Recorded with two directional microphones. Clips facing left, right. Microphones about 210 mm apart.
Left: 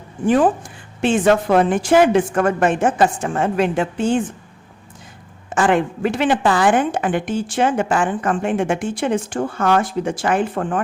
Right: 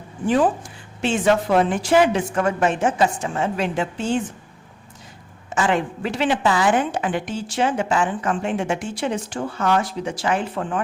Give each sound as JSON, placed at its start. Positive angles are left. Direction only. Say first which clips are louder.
{"t": 0.3, "sound": "a woman's voice", "louder": "left 3 dB", "side_deg": 50}
{"t": 5.5, "sound": "a woman's voice", "louder": "left 4 dB", "side_deg": 55}